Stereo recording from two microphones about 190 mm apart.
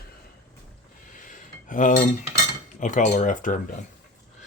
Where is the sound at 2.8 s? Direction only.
40° left (ahead or behind).